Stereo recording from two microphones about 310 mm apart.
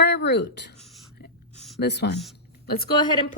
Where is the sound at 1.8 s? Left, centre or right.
Left.